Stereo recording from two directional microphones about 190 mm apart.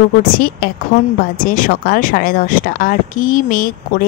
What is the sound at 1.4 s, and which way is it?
Speech, 45° left (ahead or behind).